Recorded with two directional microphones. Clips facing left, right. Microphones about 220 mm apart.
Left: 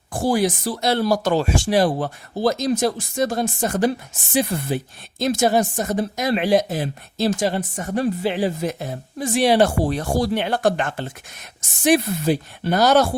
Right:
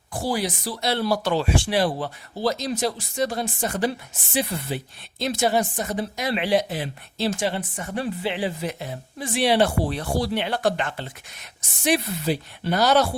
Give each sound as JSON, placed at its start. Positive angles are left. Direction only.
{"t": 0.1, "sound": "a woman's voice", "side_deg": 50}